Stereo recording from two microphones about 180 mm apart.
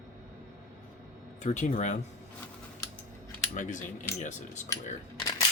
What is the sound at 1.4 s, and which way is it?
Speech, 40° left (ahead or behind).